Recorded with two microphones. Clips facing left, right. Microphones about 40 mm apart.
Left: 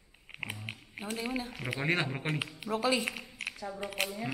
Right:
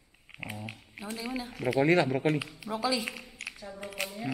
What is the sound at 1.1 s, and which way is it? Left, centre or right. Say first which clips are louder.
Speech: even; left.